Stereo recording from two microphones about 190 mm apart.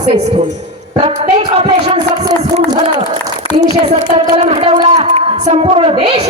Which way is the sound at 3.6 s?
20° right (ahead or behind).